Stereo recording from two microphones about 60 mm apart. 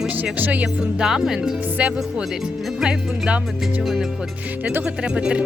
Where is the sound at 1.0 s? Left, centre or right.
Centre.